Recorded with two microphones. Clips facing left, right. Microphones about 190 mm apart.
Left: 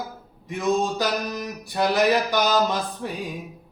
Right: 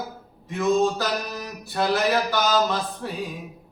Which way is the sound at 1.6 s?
15° left (ahead or behind).